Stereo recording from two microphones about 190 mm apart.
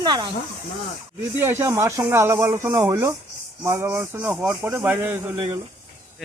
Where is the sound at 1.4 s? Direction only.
10° right (ahead or behind).